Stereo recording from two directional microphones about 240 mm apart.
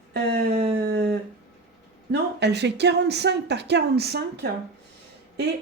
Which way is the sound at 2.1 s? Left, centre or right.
Right.